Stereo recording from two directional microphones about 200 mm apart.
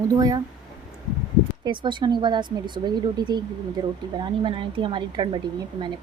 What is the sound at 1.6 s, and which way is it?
Speech, 25° right (ahead or behind).